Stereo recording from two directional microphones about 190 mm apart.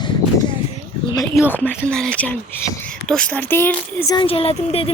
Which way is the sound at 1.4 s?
10° left (ahead or behind).